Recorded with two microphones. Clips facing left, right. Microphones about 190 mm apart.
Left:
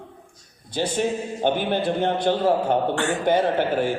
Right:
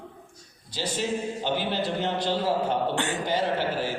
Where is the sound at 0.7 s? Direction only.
55° left (ahead or behind).